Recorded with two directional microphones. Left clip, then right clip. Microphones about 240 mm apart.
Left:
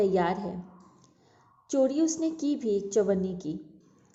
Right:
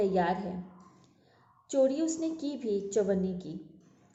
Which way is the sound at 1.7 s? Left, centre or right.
Left.